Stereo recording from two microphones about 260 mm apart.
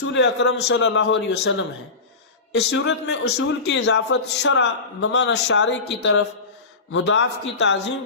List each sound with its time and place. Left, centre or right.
0.0 s a man's voice: left